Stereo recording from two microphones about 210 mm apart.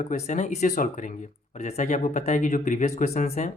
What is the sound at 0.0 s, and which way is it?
Speech, 35° left (ahead or behind).